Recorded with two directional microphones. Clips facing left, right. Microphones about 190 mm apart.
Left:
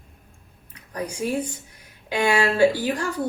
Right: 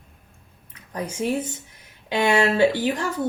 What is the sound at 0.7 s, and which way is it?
Speech, 25° right (ahead or behind).